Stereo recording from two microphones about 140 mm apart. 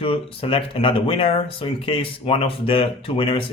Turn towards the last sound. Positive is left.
turn(degrees=40)  # may be behind; listen again after turning